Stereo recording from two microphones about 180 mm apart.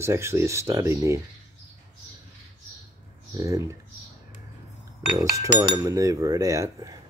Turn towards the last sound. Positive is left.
turn(degrees=-20)  # may be behind; listen again after turning